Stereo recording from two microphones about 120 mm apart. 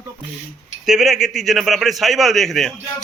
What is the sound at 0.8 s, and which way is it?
A man's voice, centre (ahead or behind).